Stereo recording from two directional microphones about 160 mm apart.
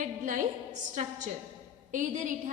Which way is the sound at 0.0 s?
50° right (ahead or behind).